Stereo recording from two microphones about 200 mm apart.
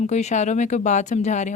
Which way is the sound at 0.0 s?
35° left (ahead or behind).